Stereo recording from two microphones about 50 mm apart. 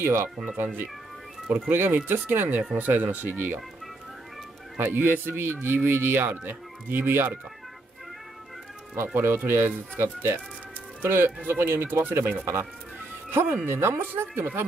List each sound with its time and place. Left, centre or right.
0.0 s speech: right
1.5 s speech: right
4.7 s speech: right
8.9 s speech: right